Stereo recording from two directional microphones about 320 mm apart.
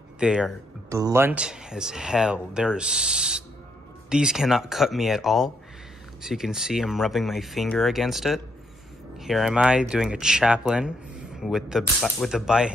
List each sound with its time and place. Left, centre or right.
0.2 s speech: centre